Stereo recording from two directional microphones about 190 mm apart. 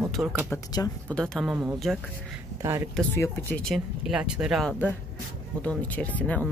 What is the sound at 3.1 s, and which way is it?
Speech, 10° left (ahead or behind).